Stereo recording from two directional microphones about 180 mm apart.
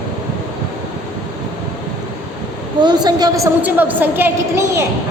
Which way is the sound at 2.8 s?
25° right (ahead or behind).